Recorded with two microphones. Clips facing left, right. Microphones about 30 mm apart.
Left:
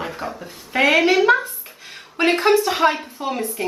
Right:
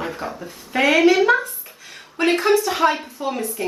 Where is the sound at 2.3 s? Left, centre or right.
Centre.